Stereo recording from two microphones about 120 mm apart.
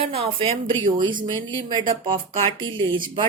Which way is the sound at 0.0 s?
55° right (ahead or behind).